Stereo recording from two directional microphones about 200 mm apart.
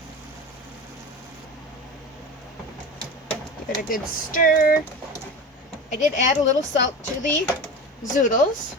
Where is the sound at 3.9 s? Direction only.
45° left (ahead or behind).